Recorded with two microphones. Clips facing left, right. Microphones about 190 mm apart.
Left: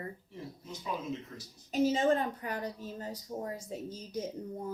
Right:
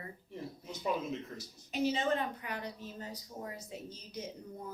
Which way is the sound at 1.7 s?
45° left (ahead or behind).